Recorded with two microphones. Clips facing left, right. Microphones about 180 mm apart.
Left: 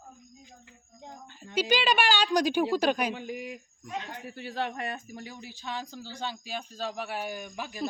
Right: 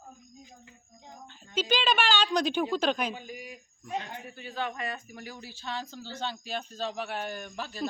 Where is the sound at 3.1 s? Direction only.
70° left (ahead or behind).